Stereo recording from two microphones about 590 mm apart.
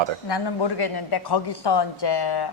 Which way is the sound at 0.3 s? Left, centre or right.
Left.